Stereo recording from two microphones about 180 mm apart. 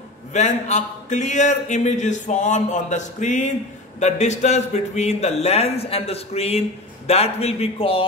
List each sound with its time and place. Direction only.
0.3 s a man's voice: 40° left (ahead or behind)